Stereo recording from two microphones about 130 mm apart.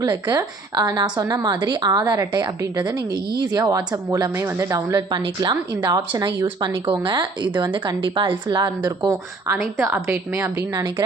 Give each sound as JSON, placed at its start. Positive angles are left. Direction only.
{"t": 0.0, "sound": "a woman's voice", "side_deg": -25}
{"t": 9.8, "sound": "a woman's voice", "side_deg": -15}